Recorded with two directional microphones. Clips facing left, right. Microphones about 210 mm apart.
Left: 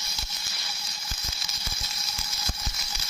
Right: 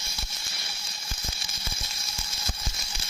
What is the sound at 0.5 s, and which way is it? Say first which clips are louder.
Water: left 1 dB; 25° right (ahead or behind).